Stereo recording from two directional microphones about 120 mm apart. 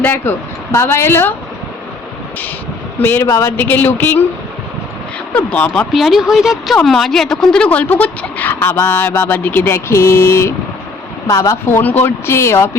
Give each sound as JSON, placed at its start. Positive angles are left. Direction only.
{"t": 0.0, "sound": "speech", "side_deg": 20}
{"t": 3.0, "sound": "a woman's voice", "side_deg": 20}
{"t": 5.3, "sound": "a woman's voice", "side_deg": 10}
{"t": 5.9, "sound": "a woman's voice", "side_deg": 0}
{"t": 11.8, "sound": "speech", "side_deg": 15}